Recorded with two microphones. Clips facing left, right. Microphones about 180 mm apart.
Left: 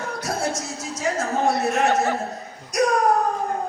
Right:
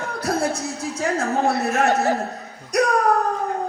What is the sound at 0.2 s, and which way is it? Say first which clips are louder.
Speech: right 5 dB; 60° right (ahead or behind).